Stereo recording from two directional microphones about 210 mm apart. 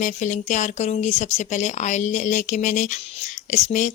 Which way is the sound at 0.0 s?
35° left (ahead or behind).